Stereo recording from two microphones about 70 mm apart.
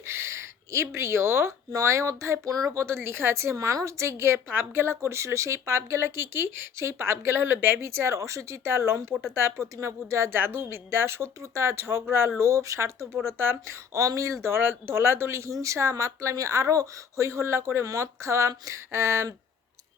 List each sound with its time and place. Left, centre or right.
0.0 s a sound: right
1.7 s speech: right
2.5 s speech: right
2.7 s a woman's voice: right
13.2 s a woman's voice: right
14.4 s a woman's voice: right